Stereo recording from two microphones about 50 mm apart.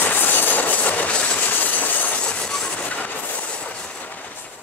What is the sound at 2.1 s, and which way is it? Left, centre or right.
Train, left.